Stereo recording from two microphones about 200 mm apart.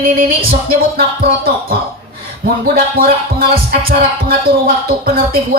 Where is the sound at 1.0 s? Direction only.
50° right (ahead or behind).